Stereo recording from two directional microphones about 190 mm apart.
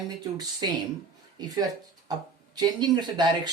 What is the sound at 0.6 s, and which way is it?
Speech, 25° right (ahead or behind).